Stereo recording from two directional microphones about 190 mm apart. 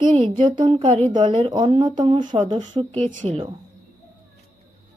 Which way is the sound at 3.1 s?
40° right (ahead or behind).